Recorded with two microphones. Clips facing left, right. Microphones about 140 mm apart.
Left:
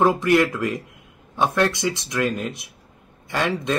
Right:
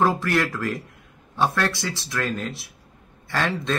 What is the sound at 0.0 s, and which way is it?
A man's voice, 20° left (ahead or behind).